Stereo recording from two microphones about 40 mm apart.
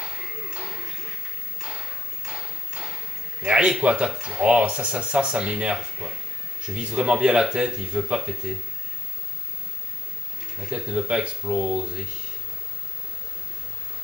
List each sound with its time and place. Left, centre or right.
0.0 s music: right
1.6 s a sound: right
3.4 s speech: right
10.7 s speech: right